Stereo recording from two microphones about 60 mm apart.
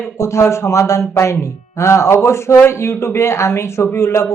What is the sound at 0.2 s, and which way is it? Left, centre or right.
Speech, left.